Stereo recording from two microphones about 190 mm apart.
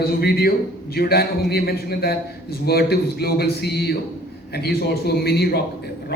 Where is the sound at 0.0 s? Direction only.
55° left (ahead or behind).